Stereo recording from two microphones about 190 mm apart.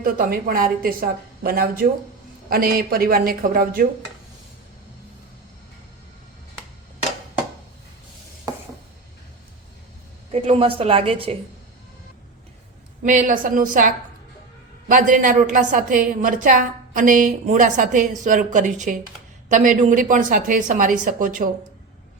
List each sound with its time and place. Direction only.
0.0 s a woman's voice: 50° right (ahead or behind)
10.3 s a woman's voice: 30° right (ahead or behind)
13.0 s a woman's voice: 45° right (ahead or behind)